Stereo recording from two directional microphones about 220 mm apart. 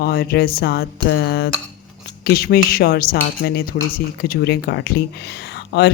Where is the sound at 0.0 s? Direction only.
45° left (ahead or behind).